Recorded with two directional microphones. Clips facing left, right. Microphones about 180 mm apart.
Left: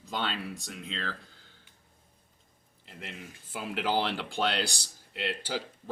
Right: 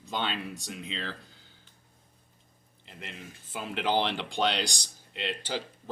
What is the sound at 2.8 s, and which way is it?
Speech, 5° left (ahead or behind).